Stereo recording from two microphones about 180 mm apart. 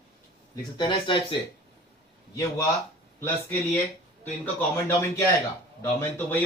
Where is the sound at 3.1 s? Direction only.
10° left (ahead or behind).